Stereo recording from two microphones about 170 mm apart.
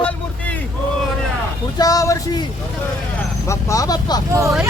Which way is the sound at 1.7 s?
20° left (ahead or behind).